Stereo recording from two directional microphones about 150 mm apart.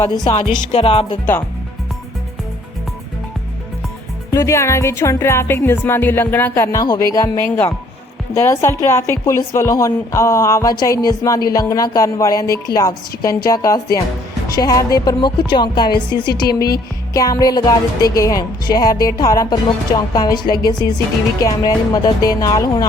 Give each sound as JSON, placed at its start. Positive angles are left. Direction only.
{"t": 0.3, "sound": "speech", "side_deg": 45}
{"t": 4.3, "sound": "a woman's voice", "side_deg": 20}